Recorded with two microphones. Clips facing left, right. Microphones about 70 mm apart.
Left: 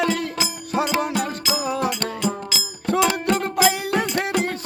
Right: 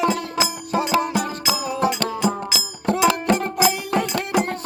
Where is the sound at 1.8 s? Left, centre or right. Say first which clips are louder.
Right 3 dB; centre.